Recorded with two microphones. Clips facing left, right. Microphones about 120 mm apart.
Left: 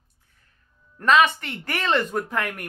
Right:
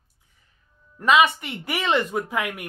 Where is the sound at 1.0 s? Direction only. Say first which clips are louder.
Even; 10° right (ahead or behind).